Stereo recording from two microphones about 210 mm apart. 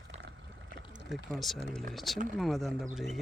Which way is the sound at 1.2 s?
Centre (ahead or behind).